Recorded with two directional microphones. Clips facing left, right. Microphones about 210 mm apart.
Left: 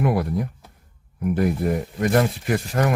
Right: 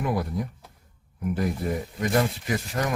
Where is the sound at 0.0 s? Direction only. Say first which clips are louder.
Left 5 dB; 65° left (ahead or behind).